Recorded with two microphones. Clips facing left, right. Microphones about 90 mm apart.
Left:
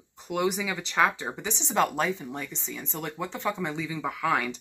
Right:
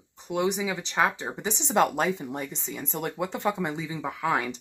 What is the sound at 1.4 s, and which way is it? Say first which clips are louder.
Speech: right 3 dB; 40° right (ahead or behind).